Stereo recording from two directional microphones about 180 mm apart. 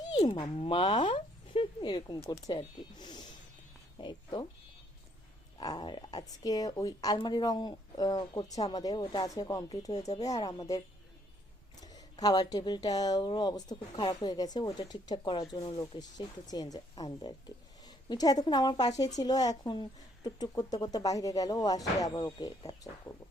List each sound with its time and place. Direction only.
0.0 s speech: 25° left (ahead or behind)
5.5 s speech: 25° left (ahead or behind)